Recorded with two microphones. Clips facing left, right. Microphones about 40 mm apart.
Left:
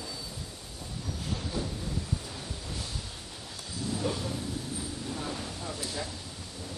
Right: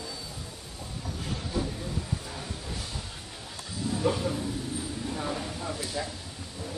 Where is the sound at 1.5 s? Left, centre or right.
Centre.